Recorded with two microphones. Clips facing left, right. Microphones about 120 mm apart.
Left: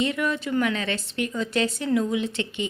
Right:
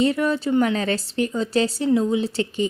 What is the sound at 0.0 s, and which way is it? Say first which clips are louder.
A woman's voice: right 5 dB; 35° right (ahead or behind).